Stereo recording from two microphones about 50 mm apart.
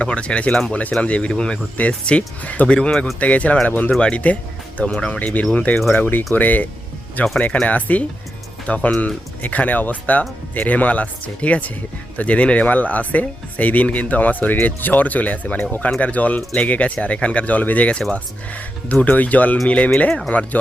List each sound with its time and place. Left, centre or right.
0.0 s speech: left
5.9 s speech: left
20.1 s speech: centre